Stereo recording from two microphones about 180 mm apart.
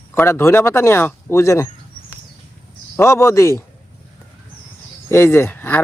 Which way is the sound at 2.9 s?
15° left (ahead or behind).